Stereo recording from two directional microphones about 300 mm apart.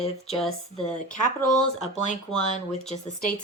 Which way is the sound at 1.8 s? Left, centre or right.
Left.